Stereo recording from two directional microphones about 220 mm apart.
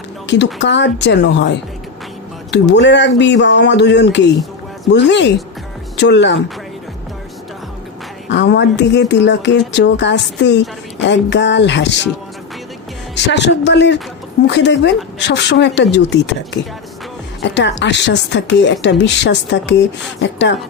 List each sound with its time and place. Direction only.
0.3 s speech: 55° left (ahead or behind)
8.3 s speech: 50° left (ahead or behind)
13.1 s speech: 50° left (ahead or behind)